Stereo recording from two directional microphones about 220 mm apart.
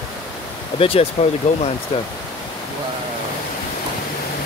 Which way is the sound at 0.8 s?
25° left (ahead or behind).